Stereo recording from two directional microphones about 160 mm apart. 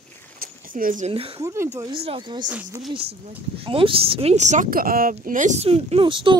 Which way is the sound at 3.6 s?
35° right (ahead or behind).